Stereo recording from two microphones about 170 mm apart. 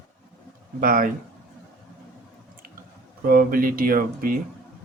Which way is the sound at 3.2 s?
55° right (ahead or behind).